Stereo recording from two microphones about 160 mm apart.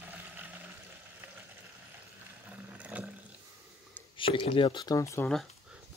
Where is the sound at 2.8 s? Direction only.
10° right (ahead or behind).